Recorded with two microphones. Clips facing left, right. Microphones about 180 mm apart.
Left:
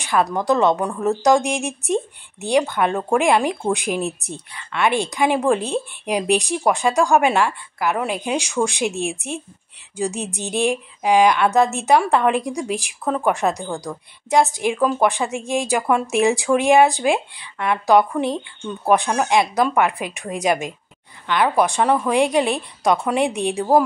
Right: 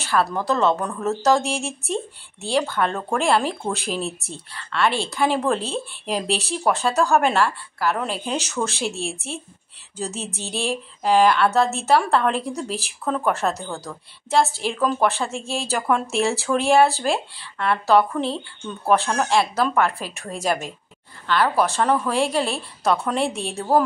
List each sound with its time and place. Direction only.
0.0 s a woman's voice: 15° left (ahead or behind)